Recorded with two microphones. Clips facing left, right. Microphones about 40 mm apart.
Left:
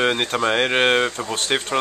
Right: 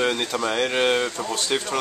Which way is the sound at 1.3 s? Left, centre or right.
Left.